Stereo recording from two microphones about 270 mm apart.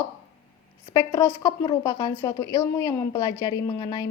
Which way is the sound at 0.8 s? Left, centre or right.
Centre.